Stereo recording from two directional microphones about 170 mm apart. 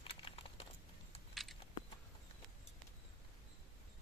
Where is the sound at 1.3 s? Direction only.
Centre (ahead or behind).